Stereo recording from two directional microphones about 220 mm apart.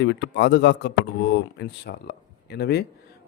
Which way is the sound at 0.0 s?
55° left (ahead or behind).